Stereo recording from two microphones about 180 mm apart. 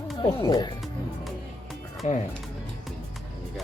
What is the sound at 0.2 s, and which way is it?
Speech, 25° left (ahead or behind).